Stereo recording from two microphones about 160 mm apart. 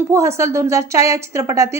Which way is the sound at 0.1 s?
20° right (ahead or behind).